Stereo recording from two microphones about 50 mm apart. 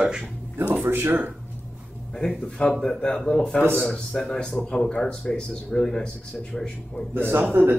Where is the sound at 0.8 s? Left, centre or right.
Right.